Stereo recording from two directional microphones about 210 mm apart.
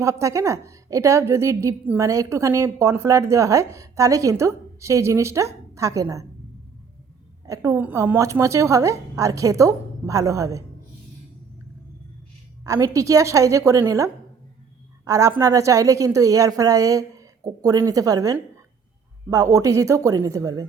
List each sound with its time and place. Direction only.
0.0 s a woman's voice: 15° right (ahead or behind)
7.4 s a woman's voice: 15° right (ahead or behind)
12.6 s a woman's voice: 15° right (ahead or behind)